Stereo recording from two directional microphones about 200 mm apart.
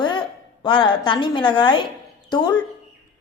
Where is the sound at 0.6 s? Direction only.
25° left (ahead or behind).